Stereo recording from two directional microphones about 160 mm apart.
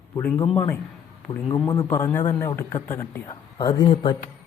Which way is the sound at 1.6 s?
20° left (ahead or behind).